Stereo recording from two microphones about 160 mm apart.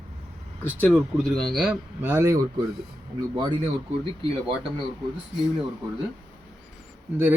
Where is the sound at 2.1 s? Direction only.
20° right (ahead or behind).